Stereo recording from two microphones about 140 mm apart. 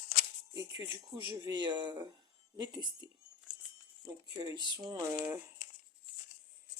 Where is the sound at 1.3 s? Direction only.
30° right (ahead or behind).